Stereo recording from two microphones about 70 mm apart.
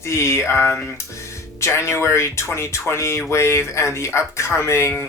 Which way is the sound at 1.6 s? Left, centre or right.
Left.